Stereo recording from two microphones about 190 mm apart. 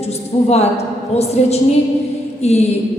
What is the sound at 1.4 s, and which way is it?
Speech, 35° left (ahead or behind).